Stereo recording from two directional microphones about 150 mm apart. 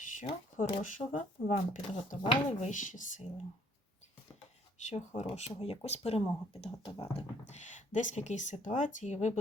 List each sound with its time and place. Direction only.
0.2 s speech: 55° left (ahead or behind)
4.9 s speech: 50° left (ahead or behind)